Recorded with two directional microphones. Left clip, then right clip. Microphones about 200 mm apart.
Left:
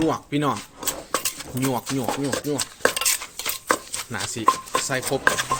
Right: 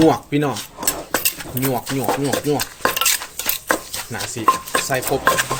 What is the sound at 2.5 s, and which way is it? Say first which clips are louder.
Stir: right 3 dB; 10° left (ahead or behind).